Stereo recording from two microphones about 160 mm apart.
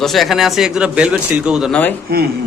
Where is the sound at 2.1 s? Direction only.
75° right (ahead or behind).